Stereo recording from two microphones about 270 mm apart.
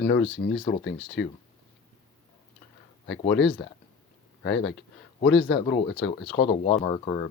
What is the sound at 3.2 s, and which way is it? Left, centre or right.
Speech, centre.